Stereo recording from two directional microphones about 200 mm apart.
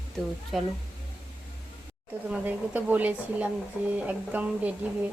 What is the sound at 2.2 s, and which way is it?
Speech, 5° right (ahead or behind).